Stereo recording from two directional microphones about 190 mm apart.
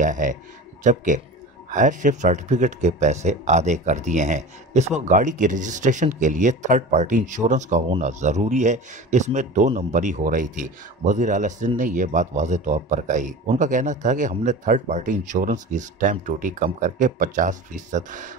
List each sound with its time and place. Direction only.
0.0 s a man's voice: 40° right (ahead or behind)